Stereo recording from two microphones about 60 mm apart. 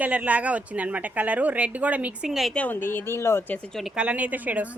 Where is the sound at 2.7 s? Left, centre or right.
Left.